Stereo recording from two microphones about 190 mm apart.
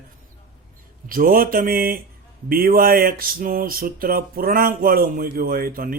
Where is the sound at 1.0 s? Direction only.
50° right (ahead or behind).